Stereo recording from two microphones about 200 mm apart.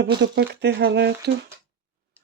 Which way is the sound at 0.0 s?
60° right (ahead or behind).